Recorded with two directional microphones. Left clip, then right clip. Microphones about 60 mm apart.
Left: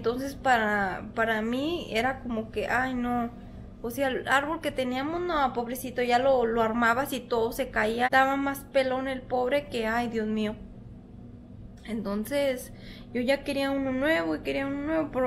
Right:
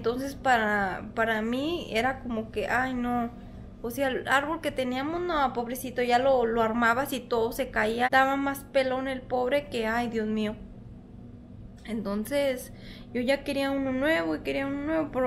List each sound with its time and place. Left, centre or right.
0.0 s a woman's voice: centre
3.0 s a woman's voice: centre
3.8 s a woman's voice: centre
11.9 s a woman's voice: centre